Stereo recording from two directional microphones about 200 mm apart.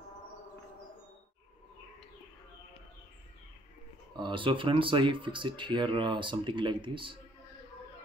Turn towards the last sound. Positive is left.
turn(degrees=-25)  # may be behind; listen again after turning